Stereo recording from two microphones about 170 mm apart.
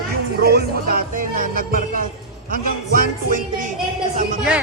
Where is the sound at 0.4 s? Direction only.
60° right (ahead or behind).